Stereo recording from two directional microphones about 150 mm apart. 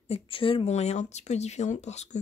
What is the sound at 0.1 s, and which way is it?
Speech, 35° left (ahead or behind).